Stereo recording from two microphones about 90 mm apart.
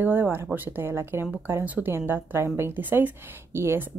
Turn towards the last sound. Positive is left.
turn(degrees=-30)  # may be behind; listen again after turning